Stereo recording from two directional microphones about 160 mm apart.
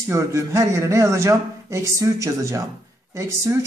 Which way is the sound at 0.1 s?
20° right (ahead or behind).